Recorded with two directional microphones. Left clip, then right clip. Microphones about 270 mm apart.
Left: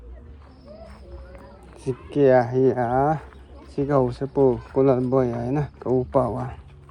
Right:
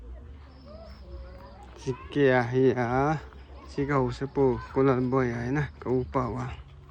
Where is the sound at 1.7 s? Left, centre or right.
Centre.